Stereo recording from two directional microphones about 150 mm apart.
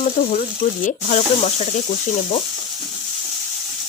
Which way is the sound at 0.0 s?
55° left (ahead or behind).